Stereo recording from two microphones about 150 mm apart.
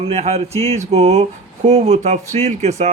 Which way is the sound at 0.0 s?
45° right (ahead or behind).